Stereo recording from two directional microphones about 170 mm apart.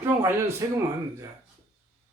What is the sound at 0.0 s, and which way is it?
Speech, 15° right (ahead or behind).